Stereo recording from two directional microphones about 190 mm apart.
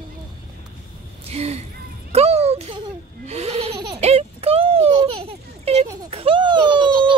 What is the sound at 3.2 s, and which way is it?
Speech, 35° right (ahead or behind).